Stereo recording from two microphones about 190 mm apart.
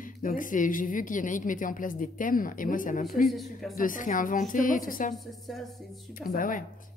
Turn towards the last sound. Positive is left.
turn(degrees=45)  # may be behind; listen again after turning